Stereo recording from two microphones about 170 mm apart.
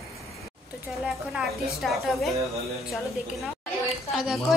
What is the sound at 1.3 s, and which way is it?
Speech, centre (ahead or behind).